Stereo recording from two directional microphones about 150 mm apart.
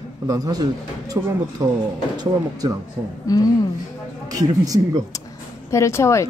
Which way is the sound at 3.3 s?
25° left (ahead or behind).